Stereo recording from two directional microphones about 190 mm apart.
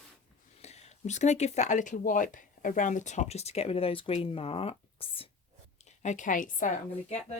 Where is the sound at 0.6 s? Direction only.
35° left (ahead or behind).